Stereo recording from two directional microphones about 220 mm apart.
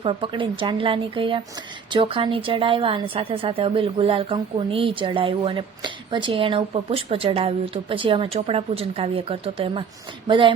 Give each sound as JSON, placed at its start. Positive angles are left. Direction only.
{"t": 0.0, "sound": "a woman's voice", "side_deg": -25}